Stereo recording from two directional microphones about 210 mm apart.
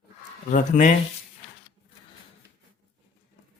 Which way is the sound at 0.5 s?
35° left (ahead or behind).